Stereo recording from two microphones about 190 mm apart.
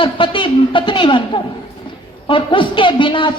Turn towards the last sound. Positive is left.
turn(degrees=25)  # may be behind; listen again after turning